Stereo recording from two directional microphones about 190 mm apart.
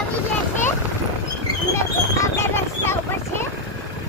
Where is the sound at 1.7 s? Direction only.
15° left (ahead or behind).